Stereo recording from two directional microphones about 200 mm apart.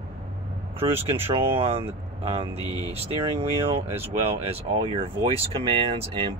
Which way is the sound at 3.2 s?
30° right (ahead or behind).